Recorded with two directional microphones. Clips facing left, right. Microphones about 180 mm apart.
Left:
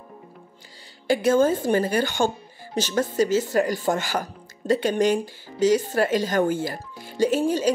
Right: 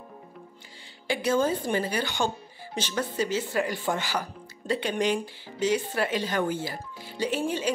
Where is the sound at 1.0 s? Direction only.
45° left (ahead or behind).